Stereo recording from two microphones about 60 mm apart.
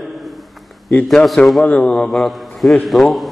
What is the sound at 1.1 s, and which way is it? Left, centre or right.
Speech, centre.